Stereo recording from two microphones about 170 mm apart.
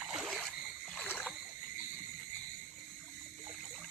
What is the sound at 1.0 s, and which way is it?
Rowboat, 10° left (ahead or behind).